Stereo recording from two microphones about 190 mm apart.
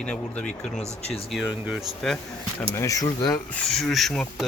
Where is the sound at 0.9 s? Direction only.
30° left (ahead or behind).